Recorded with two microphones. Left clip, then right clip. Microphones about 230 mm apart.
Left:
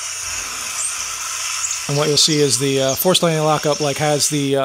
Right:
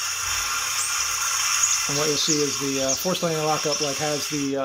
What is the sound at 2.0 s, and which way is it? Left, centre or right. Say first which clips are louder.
Speech: left 10 dB; left.